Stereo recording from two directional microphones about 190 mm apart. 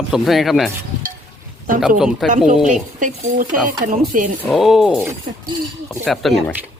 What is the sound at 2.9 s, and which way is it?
Speech, 45° right (ahead or behind).